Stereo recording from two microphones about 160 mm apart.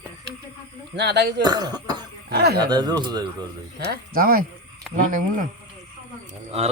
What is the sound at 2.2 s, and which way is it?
Speech, 90° right.